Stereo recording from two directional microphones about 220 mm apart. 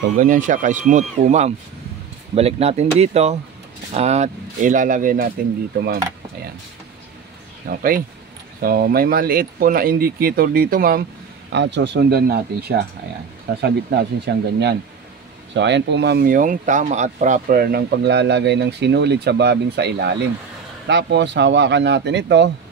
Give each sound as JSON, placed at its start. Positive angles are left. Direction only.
{"t": 0.2, "sound": "speech", "side_deg": -35}
{"t": 7.6, "sound": "speech", "side_deg": -40}
{"t": 11.5, "sound": "speech", "side_deg": -55}